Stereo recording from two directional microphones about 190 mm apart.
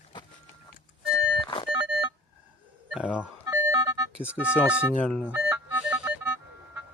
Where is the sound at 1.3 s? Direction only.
25° left (ahead or behind).